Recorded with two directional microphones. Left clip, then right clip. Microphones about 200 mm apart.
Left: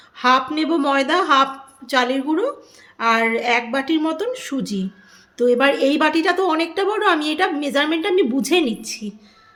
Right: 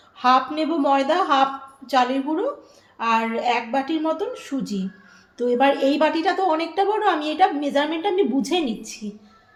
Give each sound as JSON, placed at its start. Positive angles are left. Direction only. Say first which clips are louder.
{"t": 0.2, "sound": "a woman's voice", "louder": "left 1 dB", "side_deg": 40}